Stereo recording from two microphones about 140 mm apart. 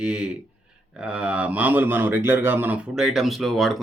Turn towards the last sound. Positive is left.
turn(degrees=0)  # may be behind; listen again after turning